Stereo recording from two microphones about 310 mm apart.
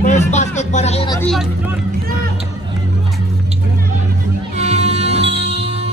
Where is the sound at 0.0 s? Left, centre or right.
Left.